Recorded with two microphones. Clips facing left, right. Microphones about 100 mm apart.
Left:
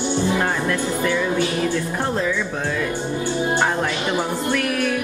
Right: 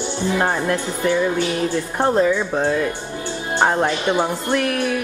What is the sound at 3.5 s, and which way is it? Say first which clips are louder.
Music: right 3 dB; 30° right (ahead or behind).